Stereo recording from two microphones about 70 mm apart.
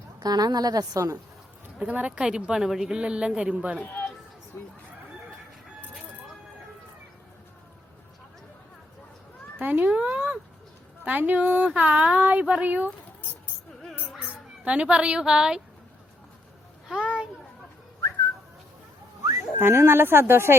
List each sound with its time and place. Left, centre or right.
0.2 s a woman's voice: right
1.8 s speech: right
4.5 s speech: left
9.6 s speech: right
14.6 s speech: centre
16.9 s a child's voice: centre
19.5 s speech: right